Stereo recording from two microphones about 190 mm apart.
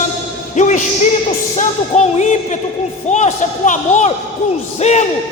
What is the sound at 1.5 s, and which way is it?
A man's voice, 35° left (ahead or behind).